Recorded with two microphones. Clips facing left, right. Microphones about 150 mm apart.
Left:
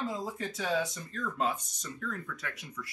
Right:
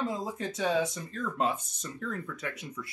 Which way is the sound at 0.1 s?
25° right (ahead or behind).